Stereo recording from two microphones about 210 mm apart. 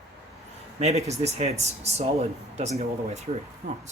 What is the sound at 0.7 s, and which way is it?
Speech, 30° right (ahead or behind).